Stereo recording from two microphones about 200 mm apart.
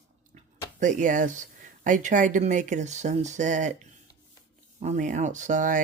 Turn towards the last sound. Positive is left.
turn(degrees=-40)  # may be behind; listen again after turning